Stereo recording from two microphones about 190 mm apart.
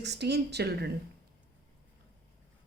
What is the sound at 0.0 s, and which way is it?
Speech, 60° right (ahead or behind).